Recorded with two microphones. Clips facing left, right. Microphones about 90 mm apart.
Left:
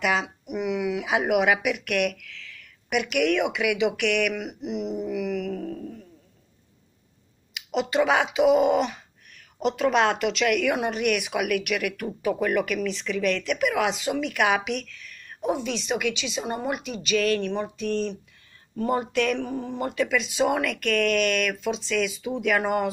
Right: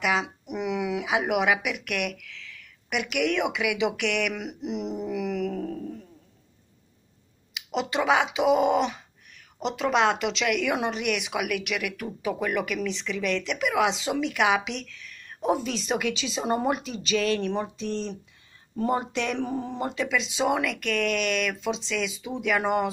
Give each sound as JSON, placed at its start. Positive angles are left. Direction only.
{"t": 0.0, "sound": "speech", "side_deg": -15}
{"t": 0.5, "sound": "a sound", "side_deg": 5}
{"t": 0.7, "sound": "speech", "side_deg": -20}
{"t": 4.5, "sound": "a sound", "side_deg": 5}
{"t": 5.1, "sound": "a sound", "side_deg": -30}
{"t": 7.5, "sound": "speech", "side_deg": -15}
{"t": 9.6, "sound": "speech", "side_deg": -20}
{"t": 15.4, "sound": "a woman's voice", "side_deg": -40}
{"t": 20.4, "sound": "speech", "side_deg": -5}